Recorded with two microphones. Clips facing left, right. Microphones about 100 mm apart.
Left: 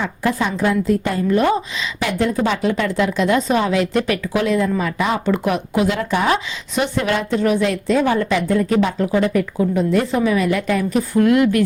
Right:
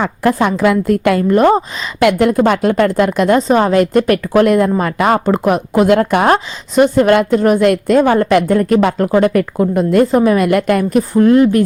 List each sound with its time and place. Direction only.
0.0 s speech: 60° right (ahead or behind); by 1.2 s 80° right
1.3 s a woman's voice: 45° right (ahead or behind)
2.0 s speech: 65° right (ahead or behind)
5.2 s speech: 45° right (ahead or behind)
11.1 s speech: 35° right (ahead or behind)